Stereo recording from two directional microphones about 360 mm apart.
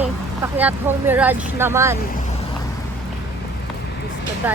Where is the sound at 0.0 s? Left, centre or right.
Centre.